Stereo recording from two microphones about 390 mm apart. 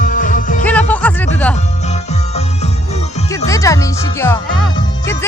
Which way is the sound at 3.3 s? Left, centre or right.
Centre.